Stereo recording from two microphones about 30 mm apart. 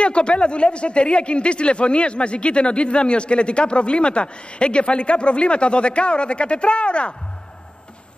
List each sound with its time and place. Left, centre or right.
0.0 s speech: left